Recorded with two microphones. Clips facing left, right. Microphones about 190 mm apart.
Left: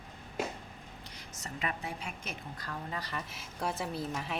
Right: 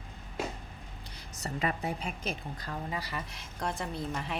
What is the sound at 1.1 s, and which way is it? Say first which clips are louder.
A woman's voice: right 7 dB; 35° right (ahead or behind).